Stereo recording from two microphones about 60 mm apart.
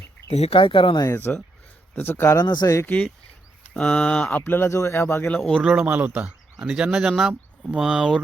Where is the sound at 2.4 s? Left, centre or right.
Left.